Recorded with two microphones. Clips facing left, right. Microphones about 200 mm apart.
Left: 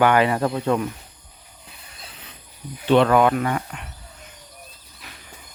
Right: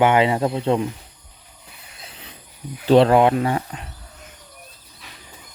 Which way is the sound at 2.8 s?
35° right (ahead or behind).